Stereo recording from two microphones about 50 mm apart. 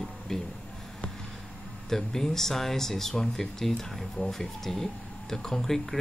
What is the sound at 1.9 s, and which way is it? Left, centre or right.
Speech, centre.